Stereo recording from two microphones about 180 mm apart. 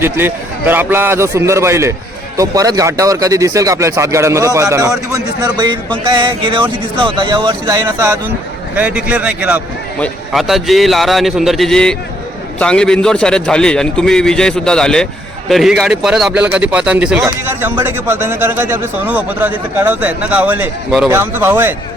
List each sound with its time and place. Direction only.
0.0 s a man's voice: 10° right (ahead or behind)